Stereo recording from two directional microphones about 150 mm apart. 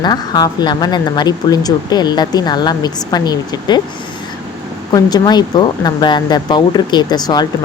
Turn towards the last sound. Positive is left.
turn(degrees=30)  # may be behind; listen again after turning